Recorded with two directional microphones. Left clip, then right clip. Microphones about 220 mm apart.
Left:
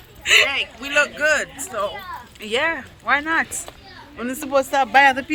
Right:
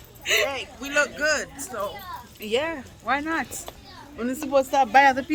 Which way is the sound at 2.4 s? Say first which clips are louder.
Left 5 dB; 15° right (ahead or behind).